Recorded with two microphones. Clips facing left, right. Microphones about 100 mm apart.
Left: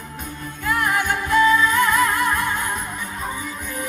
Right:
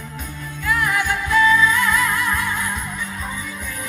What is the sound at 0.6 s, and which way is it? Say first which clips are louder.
Music: even; 50° left (ahead or behind).